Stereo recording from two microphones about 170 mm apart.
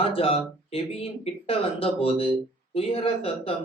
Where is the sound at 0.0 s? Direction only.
35° left (ahead or behind).